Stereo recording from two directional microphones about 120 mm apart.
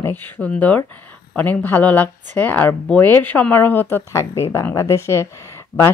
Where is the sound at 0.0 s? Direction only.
15° left (ahead or behind).